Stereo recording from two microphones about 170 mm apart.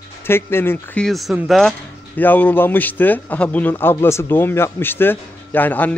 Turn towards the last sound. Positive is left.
turn(degrees=10)  # may be behind; listen again after turning